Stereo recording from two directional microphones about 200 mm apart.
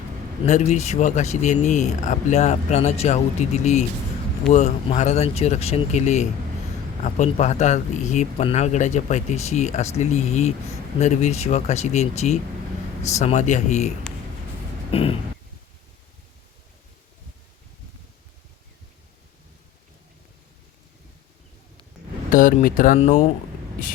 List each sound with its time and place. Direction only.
0.4 s speech: 35° left (ahead or behind)
14.8 s a sound: 30° left (ahead or behind)
22.3 s speech: 40° left (ahead or behind)